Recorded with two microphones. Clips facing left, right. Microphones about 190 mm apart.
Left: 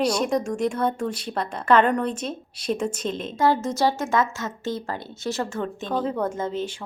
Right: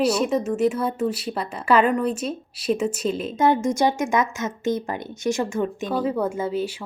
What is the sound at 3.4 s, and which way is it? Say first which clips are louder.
Speech: right 2 dB; 20° right (ahead or behind).